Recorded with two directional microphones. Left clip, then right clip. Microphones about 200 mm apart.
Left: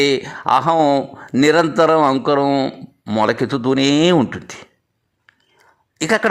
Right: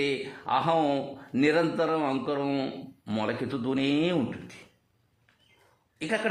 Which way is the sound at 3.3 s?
40° left (ahead or behind).